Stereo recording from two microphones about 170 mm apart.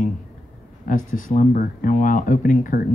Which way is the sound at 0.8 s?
50° left (ahead or behind).